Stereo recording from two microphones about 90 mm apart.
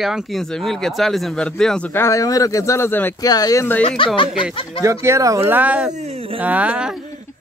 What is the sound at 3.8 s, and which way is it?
Speech, 75° left (ahead or behind).